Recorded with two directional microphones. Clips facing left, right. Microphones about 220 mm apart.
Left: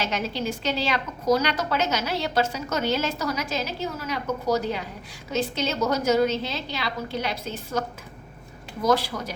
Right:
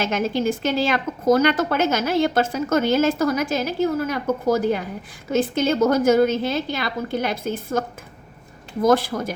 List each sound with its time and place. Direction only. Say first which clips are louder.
0.0 s a woman's voice: right 6 dB; 50° right (ahead or behind)